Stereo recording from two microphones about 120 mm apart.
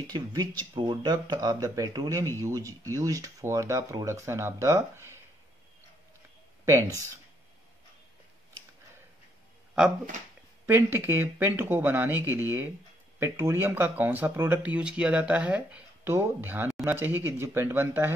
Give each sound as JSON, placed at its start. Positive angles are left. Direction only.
{"t": 0.0, "sound": "speech", "side_deg": -35}
{"t": 6.6, "sound": "speech", "side_deg": -25}
{"t": 10.7, "sound": "speech", "side_deg": -15}